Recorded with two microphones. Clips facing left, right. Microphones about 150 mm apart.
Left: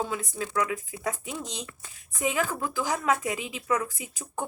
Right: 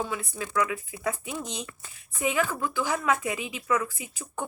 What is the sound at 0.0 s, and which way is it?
Speech, 35° left (ahead or behind).